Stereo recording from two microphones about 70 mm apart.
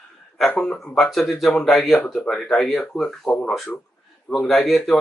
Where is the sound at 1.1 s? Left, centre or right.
Centre.